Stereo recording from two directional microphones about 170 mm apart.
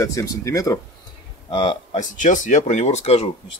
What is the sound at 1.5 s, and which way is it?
Speech, 35° left (ahead or behind).